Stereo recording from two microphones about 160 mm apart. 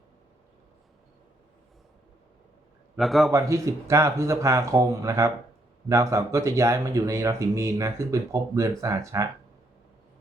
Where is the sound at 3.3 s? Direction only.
20° right (ahead or behind).